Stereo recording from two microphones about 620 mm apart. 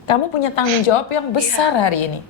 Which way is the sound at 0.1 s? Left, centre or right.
Left.